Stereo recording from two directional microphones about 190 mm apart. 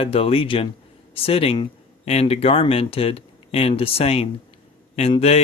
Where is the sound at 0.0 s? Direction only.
30° left (ahead or behind).